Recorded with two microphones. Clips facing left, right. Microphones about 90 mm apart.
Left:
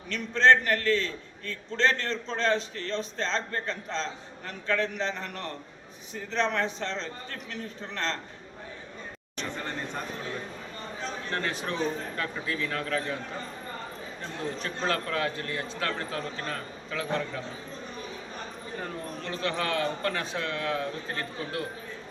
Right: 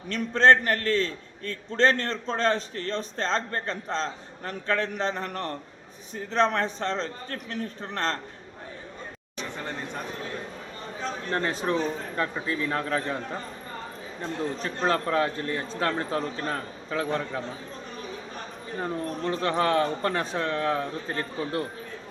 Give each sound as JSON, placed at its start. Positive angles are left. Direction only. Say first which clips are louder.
{"t": 0.1, "sound": "a man's voice", "louder": "right 2 dB", "side_deg": -45}
{"t": 11.3, "sound": "speech", "louder": "right 6 dB", "side_deg": -30}
{"t": 14.6, "sound": "a man's voice", "louder": "right 4 dB", "side_deg": -30}
{"t": 19.2, "sound": "a man's voice", "louder": "right 6 dB", "side_deg": -40}